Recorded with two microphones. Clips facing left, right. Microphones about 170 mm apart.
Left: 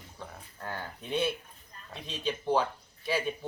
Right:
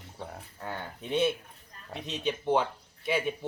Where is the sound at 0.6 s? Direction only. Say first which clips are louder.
Right 2 dB; 25° right (ahead or behind).